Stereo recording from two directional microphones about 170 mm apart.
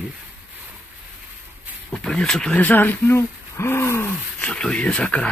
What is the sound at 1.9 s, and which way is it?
Speech, 5° left (ahead or behind).